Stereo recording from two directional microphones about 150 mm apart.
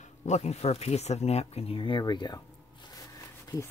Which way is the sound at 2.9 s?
25° left (ahead or behind).